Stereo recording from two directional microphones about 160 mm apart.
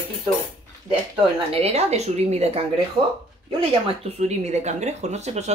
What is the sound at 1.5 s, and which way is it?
A woman's voice, 40° right (ahead or behind).